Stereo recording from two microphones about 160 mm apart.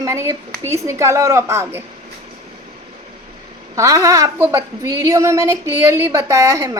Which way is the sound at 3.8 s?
20° right (ahead or behind).